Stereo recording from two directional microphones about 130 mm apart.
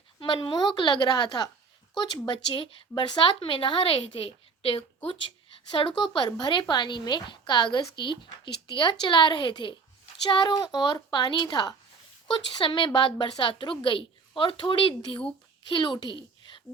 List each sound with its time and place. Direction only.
0.2 s a child's voice: 40° left (ahead or behind)